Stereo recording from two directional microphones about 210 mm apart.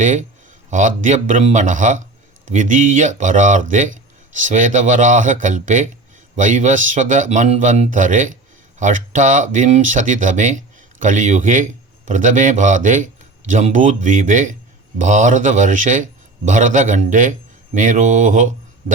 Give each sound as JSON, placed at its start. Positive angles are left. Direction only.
{"t": 0.0, "sound": "a man's voice", "side_deg": -35}